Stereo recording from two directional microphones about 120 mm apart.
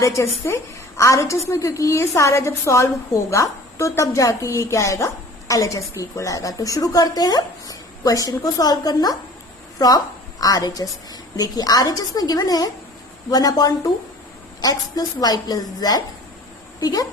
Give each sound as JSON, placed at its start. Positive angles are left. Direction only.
{"t": 0.0, "sound": "a woman's voice", "side_deg": 25}